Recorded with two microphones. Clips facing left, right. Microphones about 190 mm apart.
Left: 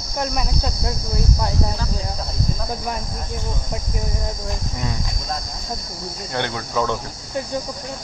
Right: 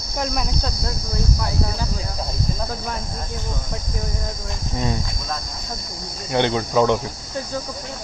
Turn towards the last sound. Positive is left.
turn(degrees=-20)  # may be behind; listen again after turning